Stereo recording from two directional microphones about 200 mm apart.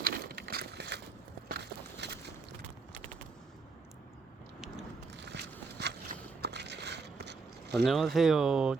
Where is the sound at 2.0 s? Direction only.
60° right (ahead or behind).